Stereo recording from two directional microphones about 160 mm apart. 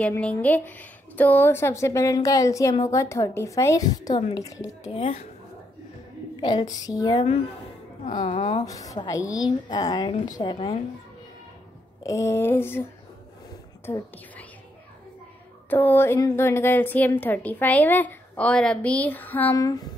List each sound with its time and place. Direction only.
0.0 s a woman's voice: 10° left (ahead or behind)
4.8 s speech: 40° left (ahead or behind)
6.4 s a woman's voice: 25° left (ahead or behind)
8.4 s a woman's voice: 30° left (ahead or behind)
12.0 s a woman's voice: 20° left (ahead or behind)
13.8 s a woman's voice: 15° left (ahead or behind)
15.7 s a woman's voice: 10° left (ahead or behind)
19.5 s a woman's voice: 20° left (ahead or behind)